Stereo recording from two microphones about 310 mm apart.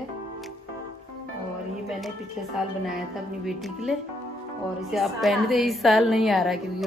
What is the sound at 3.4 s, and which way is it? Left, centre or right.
Speech, centre.